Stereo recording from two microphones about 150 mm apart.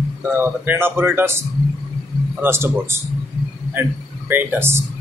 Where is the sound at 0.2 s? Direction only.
15° right (ahead or behind).